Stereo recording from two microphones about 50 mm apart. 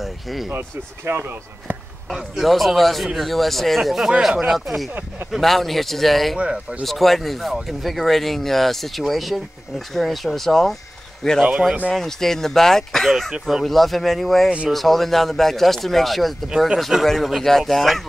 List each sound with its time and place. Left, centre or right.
0.0 s speech: centre
0.5 s speech: right
2.4 s speech: centre
6.3 s speech: right
6.8 s speech: centre
13.3 s speech: centre
13.7 s speech: centre